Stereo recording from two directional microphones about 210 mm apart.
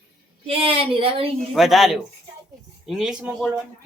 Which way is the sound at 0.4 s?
25° right (ahead or behind).